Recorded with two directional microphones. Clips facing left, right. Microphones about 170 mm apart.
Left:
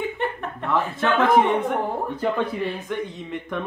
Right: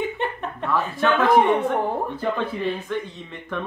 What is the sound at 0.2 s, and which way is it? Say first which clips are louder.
Chuckle: even; 20° right (ahead or behind).